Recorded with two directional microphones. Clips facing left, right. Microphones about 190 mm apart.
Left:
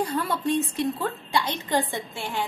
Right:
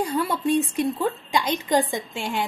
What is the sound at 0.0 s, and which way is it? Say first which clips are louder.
A woman's voice: right 2 dB; 10° right (ahead or behind).